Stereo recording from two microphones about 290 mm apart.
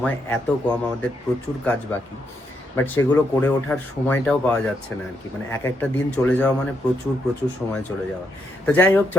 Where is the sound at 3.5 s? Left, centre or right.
Centre.